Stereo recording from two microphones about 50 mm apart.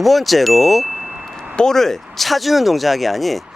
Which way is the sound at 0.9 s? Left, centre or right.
Right.